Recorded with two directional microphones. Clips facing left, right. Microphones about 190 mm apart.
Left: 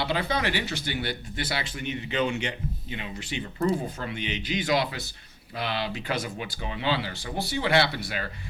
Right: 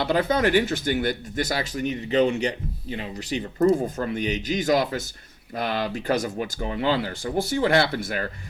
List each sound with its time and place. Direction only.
0.0 s speech: 45° right (ahead or behind)